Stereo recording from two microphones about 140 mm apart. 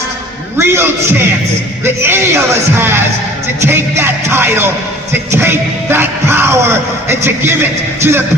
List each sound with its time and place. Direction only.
0.5 s music: 15° right (ahead or behind)